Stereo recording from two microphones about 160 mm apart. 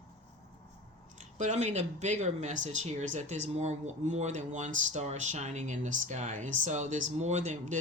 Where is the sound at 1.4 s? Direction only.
45° right (ahead or behind).